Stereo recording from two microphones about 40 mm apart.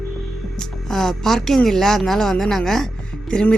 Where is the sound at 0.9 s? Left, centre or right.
Centre.